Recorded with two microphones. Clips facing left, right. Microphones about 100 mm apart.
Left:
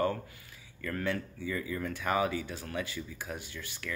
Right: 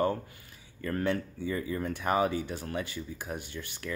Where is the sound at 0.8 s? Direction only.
30° right (ahead or behind).